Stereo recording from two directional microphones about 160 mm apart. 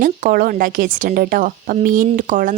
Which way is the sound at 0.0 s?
65° right (ahead or behind).